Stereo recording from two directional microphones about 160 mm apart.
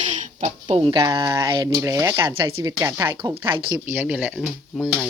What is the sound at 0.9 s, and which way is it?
Speech, 25° right (ahead or behind).